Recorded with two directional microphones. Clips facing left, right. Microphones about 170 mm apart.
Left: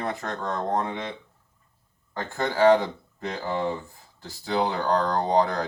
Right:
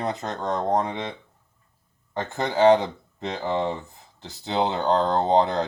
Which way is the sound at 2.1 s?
20° right (ahead or behind).